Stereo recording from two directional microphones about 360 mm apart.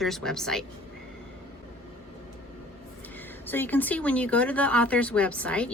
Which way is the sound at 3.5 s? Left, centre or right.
Centre.